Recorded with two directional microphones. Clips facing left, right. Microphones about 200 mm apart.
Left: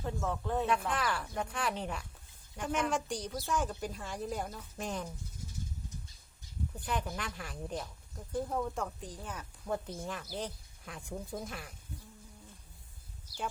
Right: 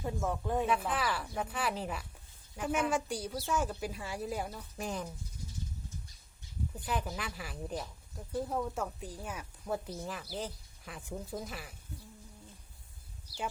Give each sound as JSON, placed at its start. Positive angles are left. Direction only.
{"t": 0.0, "sound": "a woman's voice", "side_deg": -10}
{"t": 6.7, "sound": "speech", "side_deg": -5}